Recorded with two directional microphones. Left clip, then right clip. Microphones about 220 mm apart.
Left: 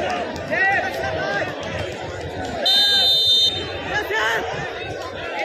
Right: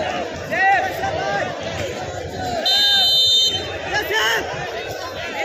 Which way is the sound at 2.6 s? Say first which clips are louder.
Even; 15° left (ahead or behind).